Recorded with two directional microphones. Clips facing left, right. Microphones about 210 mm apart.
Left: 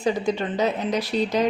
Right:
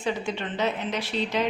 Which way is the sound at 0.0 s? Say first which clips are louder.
Left 6 dB; 40° left (ahead or behind).